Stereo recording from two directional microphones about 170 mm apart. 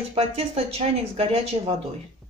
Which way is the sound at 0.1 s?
35° right (ahead or behind).